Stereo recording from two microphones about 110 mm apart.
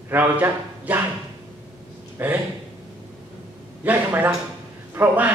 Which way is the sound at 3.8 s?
15° right (ahead or behind).